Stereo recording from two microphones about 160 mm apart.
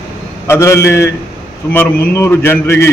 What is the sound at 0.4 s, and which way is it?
A man's voice, 15° left (ahead or behind).